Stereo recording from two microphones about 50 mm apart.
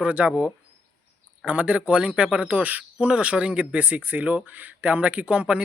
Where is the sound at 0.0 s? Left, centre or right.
Right.